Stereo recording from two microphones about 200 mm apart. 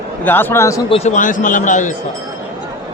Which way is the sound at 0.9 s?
35° left (ahead or behind).